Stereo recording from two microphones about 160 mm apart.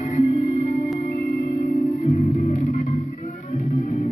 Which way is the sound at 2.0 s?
50° left (ahead or behind).